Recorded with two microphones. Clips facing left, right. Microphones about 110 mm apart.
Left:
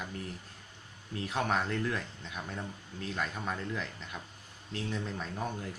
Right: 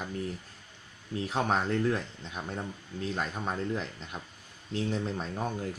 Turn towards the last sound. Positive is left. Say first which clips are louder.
# right 4 dB
turn(degrees=-30)  # may be behind; listen again after turning